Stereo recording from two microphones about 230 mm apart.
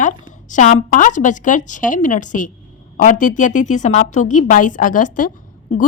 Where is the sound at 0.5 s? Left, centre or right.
Left.